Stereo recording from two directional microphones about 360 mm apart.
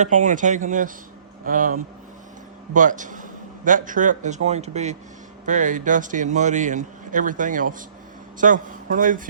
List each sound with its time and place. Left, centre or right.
0.0 s a man's voice: right